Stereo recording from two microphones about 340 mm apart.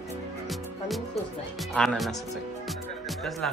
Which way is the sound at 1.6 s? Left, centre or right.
Centre.